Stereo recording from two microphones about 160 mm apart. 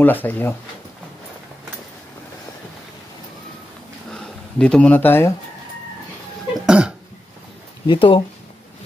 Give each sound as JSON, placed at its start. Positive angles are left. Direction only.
{"t": 0.0, "sound": "speech", "side_deg": 10}
{"t": 4.1, "sound": "a sound", "side_deg": 5}
{"t": 6.6, "sound": "cough", "side_deg": -5}
{"t": 7.8, "sound": "speech", "side_deg": 30}